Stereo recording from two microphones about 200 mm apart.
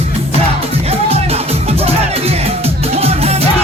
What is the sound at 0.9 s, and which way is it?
Music, 30° right (ahead or behind).